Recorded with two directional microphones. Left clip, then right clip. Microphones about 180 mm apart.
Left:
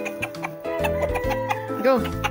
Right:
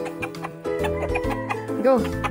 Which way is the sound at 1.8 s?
15° right (ahead or behind).